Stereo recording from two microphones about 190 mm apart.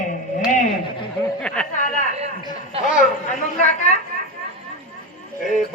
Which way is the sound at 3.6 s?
40° left (ahead or behind).